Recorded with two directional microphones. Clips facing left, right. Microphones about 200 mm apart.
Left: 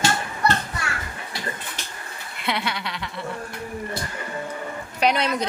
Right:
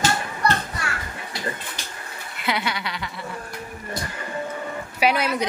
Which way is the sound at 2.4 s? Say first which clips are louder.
Right 1 dB; centre (ahead or behind).